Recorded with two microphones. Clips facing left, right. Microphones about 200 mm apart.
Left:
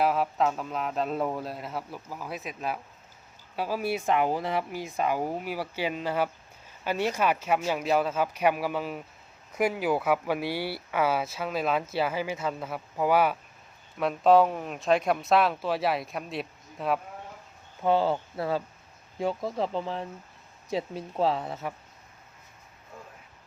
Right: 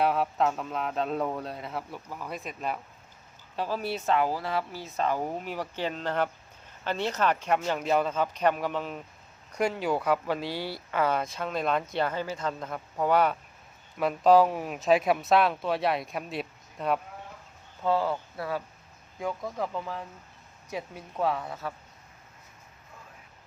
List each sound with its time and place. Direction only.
0.0 s a man's voice: centre (ahead or behind)
17.8 s speech: 25° left (ahead or behind)